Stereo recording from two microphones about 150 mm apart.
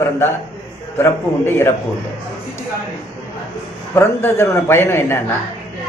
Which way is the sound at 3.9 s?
15° left (ahead or behind).